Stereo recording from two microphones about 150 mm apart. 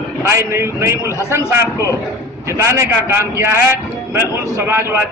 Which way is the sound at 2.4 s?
20° right (ahead or behind).